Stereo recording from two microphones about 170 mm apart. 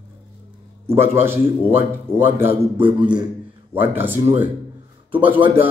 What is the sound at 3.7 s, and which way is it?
A man's voice, 10° right (ahead or behind).